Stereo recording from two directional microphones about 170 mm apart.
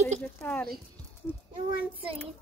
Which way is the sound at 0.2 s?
5° left (ahead or behind).